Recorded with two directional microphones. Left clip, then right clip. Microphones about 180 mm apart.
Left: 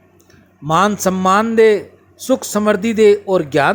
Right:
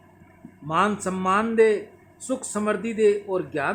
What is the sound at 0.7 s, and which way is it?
A man's voice, 40° left (ahead or behind).